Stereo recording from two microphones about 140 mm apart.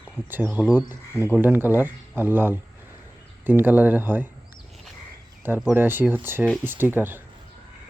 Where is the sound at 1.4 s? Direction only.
15° right (ahead or behind).